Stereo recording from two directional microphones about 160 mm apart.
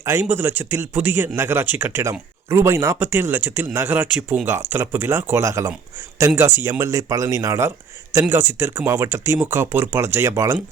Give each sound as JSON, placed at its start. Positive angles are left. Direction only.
{"t": 0.0, "sound": "speech", "side_deg": -15}